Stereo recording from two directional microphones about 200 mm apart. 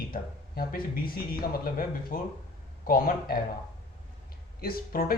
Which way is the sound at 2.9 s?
45° left (ahead or behind).